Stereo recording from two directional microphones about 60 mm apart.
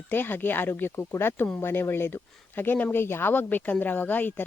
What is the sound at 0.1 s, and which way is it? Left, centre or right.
Speech, left.